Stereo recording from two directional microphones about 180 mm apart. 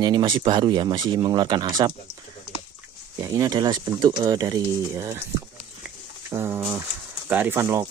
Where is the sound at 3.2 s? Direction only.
20° right (ahead or behind).